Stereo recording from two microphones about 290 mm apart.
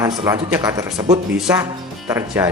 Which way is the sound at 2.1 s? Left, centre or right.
Centre.